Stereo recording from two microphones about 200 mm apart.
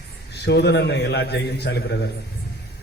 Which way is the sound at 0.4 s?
55° left (ahead or behind).